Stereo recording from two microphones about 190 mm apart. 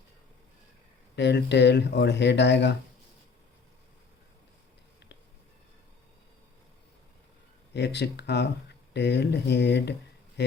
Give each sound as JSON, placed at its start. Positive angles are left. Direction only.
{"t": 1.1, "sound": "speech", "side_deg": 65}
{"t": 7.7, "sound": "speech", "side_deg": 65}